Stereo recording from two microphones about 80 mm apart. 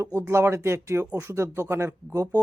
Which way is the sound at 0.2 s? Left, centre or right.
Right.